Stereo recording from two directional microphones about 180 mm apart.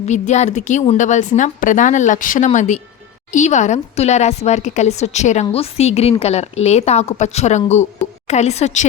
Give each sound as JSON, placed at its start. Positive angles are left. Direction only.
{"t": 0.0, "sound": "a woman's voice", "side_deg": 40}